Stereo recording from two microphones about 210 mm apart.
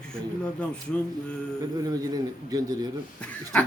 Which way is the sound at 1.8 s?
15° right (ahead or behind).